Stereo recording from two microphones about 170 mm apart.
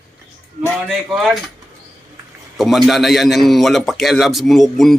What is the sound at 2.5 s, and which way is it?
A man's voice, centre (ahead or behind).